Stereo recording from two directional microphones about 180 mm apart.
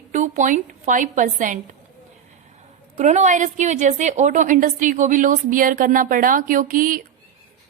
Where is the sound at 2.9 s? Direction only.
40° right (ahead or behind).